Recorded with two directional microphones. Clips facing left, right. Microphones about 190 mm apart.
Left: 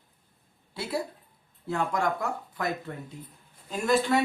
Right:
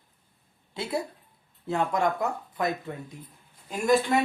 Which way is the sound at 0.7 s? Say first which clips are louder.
Right 1 dB; 20° right (ahead or behind).